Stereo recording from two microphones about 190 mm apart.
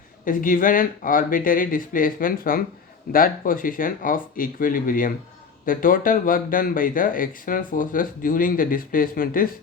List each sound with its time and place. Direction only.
0.3 s speech: 45° left (ahead or behind)